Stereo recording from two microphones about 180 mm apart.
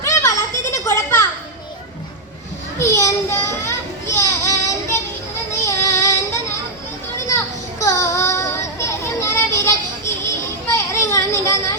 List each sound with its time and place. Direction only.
0.0 s children playing: 15° left (ahead or behind)
2.7 s children playing: 15° left (ahead or behind)
5.6 s child singing: 20° left (ahead or behind)
10.8 s a sound: 15° left (ahead or behind)